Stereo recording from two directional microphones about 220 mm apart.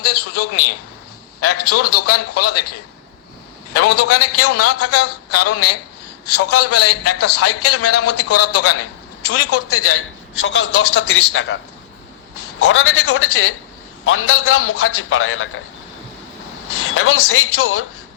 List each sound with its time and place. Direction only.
0.0 s a man's voice: 90° left
3.8 s a man's voice: 90° left; by 11.6 s 60° left (ahead or behind)
12.6 s a man's voice: 70° left (ahead or behind)
16.7 s a man's voice: 65° left (ahead or behind)